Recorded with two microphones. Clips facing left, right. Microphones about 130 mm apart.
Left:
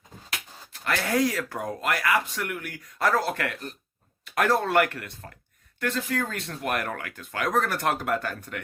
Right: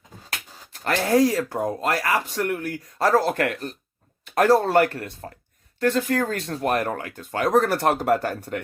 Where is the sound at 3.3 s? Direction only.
45° right (ahead or behind).